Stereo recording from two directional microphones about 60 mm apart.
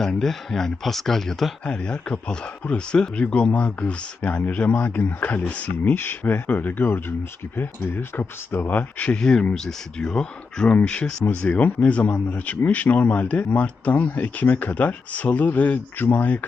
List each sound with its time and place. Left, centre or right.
0.0 s speech: centre
1.6 s a man's voice: centre
5.9 s a man's voice: left